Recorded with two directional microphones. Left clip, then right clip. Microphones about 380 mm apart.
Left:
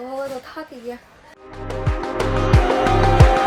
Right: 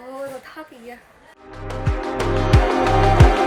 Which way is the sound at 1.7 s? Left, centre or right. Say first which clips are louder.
Even; centre.